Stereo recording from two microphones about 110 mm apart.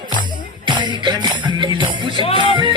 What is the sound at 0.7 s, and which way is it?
Music, 45° right (ahead or behind).